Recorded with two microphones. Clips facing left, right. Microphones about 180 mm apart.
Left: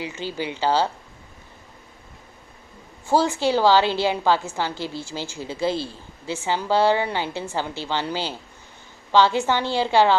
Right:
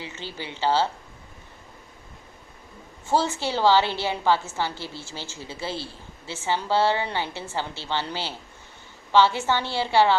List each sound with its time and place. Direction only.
0.0 s a woman's voice: 15° left (ahead or behind)
3.1 s a woman's voice: 15° left (ahead or behind)